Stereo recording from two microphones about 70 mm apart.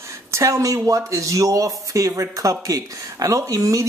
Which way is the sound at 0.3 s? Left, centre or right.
Right.